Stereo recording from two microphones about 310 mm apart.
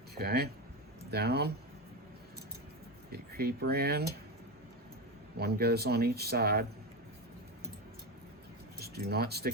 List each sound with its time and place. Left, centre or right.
0.2 s speech: right
3.1 s speech: right
5.4 s speech: right
8.8 s speech: right